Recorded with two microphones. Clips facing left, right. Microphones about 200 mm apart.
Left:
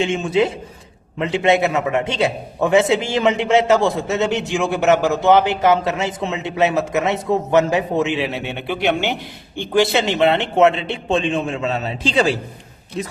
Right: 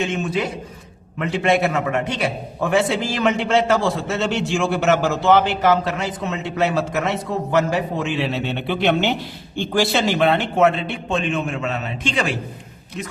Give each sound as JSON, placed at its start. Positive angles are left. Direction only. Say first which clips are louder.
{"t": 0.0, "sound": "a man's voice", "louder": "left 5 dB", "side_deg": 25}